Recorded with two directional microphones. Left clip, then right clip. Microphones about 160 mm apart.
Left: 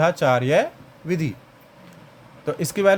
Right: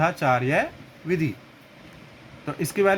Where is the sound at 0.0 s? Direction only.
90° left.